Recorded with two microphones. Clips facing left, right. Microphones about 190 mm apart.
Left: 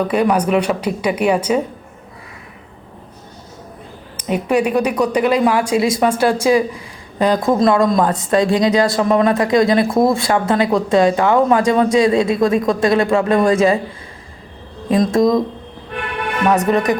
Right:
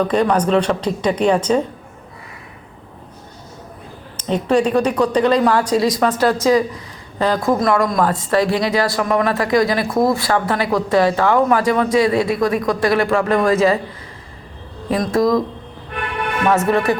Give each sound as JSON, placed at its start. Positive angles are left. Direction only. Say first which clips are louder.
{"t": 0.0, "sound": "a woman's voice", "louder": "even", "side_deg": 10}
{"t": 4.2, "sound": "a woman's voice", "louder": "even", "side_deg": 10}
{"t": 14.8, "sound": "speech", "louder": "left 2 dB", "side_deg": 20}
{"t": 16.5, "sound": "a woman's voice", "louder": "left 1 dB", "side_deg": 15}